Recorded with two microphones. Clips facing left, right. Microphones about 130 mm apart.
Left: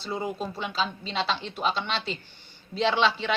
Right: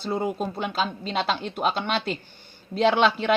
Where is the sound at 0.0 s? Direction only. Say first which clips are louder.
Right 4 dB; 50° right (ahead or behind).